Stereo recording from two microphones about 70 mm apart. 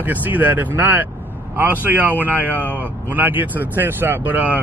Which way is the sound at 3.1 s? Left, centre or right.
Right.